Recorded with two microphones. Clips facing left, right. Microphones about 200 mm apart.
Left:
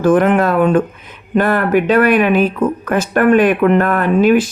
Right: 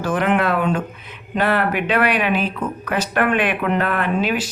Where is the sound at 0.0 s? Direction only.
50° left (ahead or behind).